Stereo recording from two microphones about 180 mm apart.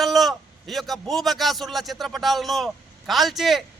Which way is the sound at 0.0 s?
Centre (ahead or behind).